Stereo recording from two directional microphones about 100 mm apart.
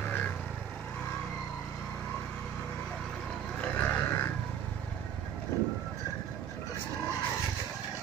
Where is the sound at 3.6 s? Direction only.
15° left (ahead or behind).